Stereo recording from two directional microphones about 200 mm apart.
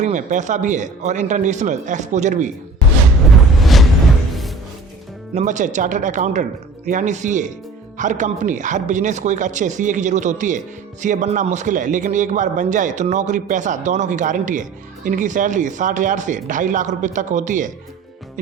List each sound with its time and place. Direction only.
0.0 s a man's voice: 40° right (ahead or behind)
3.6 s a sound: centre (ahead or behind)
4.3 s music: centre (ahead or behind)
5.3 s a man's voice: 35° right (ahead or behind)